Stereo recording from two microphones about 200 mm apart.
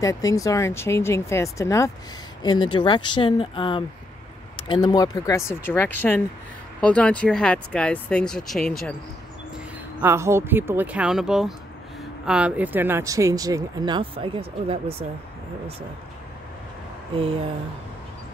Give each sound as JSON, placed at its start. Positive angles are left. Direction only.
{"t": 0.0, "sound": "speech", "side_deg": 15}
{"t": 10.0, "sound": "speech", "side_deg": -15}
{"t": 17.1, "sound": "a sound", "side_deg": -25}